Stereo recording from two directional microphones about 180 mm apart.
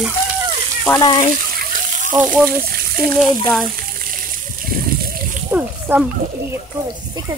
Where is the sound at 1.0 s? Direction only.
25° left (ahead or behind).